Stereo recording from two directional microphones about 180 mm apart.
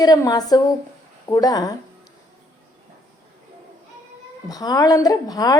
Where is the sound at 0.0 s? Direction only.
20° left (ahead or behind).